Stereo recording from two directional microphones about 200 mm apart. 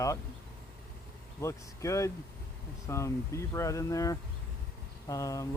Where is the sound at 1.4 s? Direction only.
15° left (ahead or behind).